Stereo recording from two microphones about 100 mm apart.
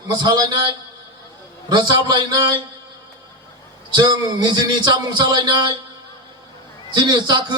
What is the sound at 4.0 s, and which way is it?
A man's voice, 50° right (ahead or behind).